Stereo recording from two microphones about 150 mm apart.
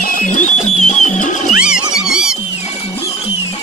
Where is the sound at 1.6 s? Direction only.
5° right (ahead or behind).